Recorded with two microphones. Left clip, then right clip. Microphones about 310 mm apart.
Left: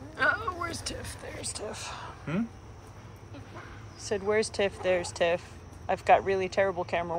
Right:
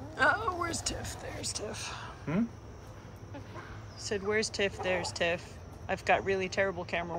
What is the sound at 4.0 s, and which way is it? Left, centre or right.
Speech, centre.